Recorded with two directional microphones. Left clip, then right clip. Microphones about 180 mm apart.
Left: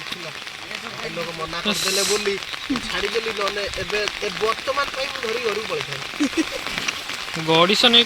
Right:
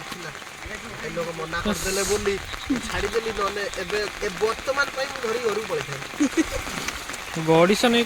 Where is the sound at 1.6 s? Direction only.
15° right (ahead or behind).